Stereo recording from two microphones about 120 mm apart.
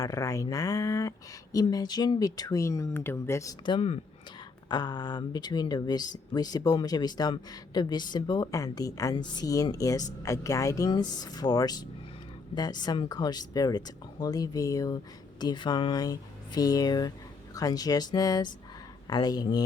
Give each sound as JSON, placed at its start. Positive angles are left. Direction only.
{"t": 0.0, "sound": "speech", "side_deg": 30}
{"t": 3.7, "sound": "speech", "side_deg": 55}
{"t": 4.7, "sound": "speech", "side_deg": 35}